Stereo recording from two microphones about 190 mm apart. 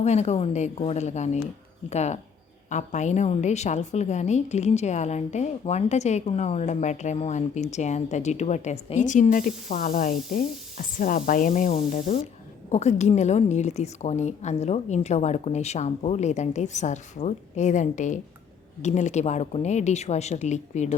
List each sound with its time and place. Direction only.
0.0 s a woman's voice: 35° left (ahead or behind)
11.9 s a woman's voice: 30° left (ahead or behind)